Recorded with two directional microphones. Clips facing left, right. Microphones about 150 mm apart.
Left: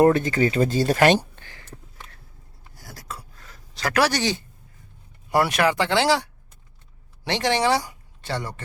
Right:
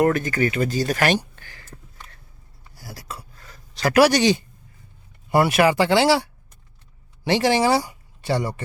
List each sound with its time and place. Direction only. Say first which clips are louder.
0.0 s speech: left 2 dB; 25° left (ahead or behind)
2.7 s writing: right 2 dB; 5° right (ahead or behind)
5.3 s speech: right 3 dB; 5° right (ahead or behind)